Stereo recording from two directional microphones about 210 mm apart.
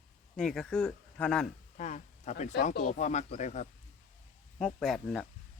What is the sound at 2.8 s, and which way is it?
Speech, 35° left (ahead or behind).